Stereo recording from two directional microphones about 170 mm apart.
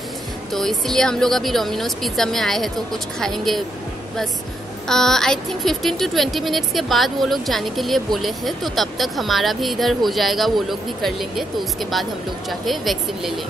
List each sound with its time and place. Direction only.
0.5 s speech: centre (ahead or behind)
4.8 s speech: centre (ahead or behind)